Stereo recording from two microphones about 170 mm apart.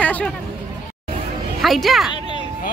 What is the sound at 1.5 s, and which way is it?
Speech, centre (ahead or behind).